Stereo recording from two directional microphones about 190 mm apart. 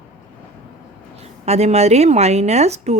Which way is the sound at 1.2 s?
35° right (ahead or behind).